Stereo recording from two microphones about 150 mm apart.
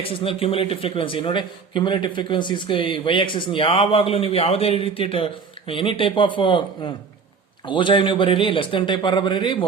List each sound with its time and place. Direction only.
0.0 s a man's voice: 40° left (ahead or behind)